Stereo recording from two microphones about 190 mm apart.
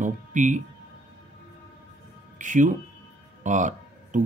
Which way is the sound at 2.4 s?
40° right (ahead or behind).